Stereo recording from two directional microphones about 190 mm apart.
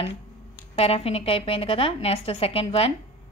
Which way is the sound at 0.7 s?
30° left (ahead or behind).